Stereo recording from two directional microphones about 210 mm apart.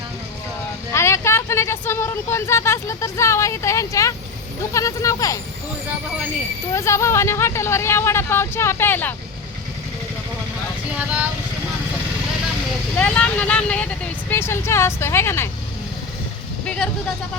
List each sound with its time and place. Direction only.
0.9 s speech: 15° left (ahead or behind)
6.7 s speech: 15° left (ahead or behind)
10.9 s vehicle: 5° right (ahead or behind)
13.0 s speech: 5° left (ahead or behind)
16.6 s vehicle: 5° left (ahead or behind)